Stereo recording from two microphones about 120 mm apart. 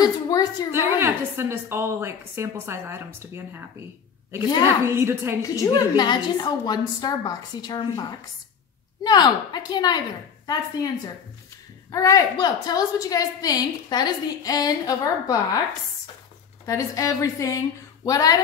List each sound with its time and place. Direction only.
0.0 s a sound: 30° left (ahead or behind)
0.7 s a woman's voice: 20° right (ahead or behind)
4.8 s a woman's voice: 20° right (ahead or behind)
5.4 s a woman's voice: 30° left (ahead or behind)
11.9 s a woman's voice: 25° left (ahead or behind)
16.6 s a woman's voice: 30° left (ahead or behind)